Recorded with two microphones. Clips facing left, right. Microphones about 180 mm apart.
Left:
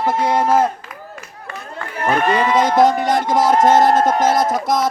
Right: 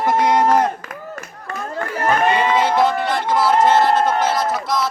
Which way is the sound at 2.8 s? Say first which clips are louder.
Left 4 dB; 45° left (ahead or behind).